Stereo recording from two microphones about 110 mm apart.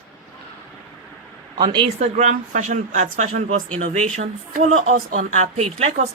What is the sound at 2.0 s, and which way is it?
A woman's voice, 90° right.